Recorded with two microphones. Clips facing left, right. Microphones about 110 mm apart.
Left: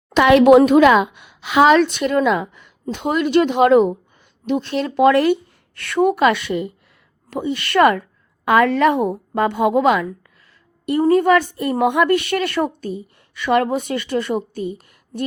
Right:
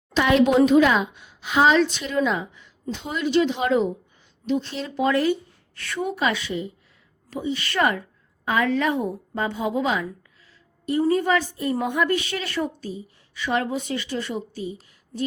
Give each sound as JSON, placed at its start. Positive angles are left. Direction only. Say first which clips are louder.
{"t": 0.1, "sound": "a woman's voice", "louder": "left 8 dB", "side_deg": 70}